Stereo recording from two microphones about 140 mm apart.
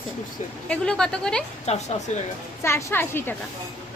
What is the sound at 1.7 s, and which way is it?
Speech, 50° left (ahead or behind).